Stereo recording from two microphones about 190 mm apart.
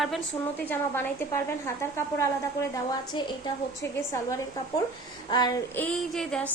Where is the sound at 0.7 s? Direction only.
10° left (ahead or behind).